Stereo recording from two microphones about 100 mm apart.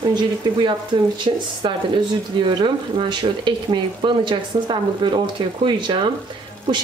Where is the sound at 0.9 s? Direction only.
50° right (ahead or behind).